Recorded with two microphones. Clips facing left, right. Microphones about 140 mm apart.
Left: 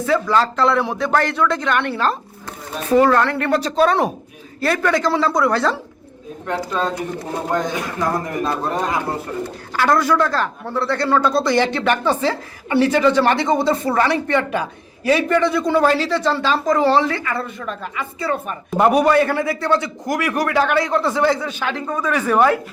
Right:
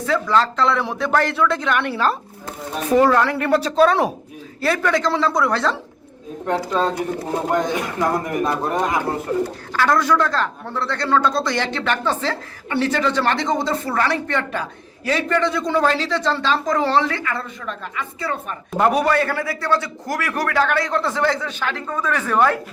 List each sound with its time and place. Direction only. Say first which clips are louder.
0.0 s speech: left 1 dB; 5° left (ahead or behind)
6.5 s speech: right 2 dB; 30° right (ahead or behind)
8.0 s a man's voice: right 1 dB; 20° right (ahead or behind)
9.7 s a man's voice: left 1 dB; 10° left (ahead or behind)